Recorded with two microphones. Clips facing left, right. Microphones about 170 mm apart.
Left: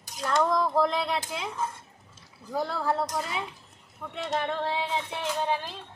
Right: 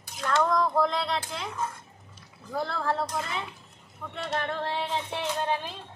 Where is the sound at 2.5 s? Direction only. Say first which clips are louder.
Left 1 dB; 10° left (ahead or behind).